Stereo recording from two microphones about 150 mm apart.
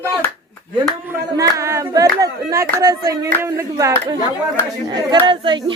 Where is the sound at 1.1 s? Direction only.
20° right (ahead or behind).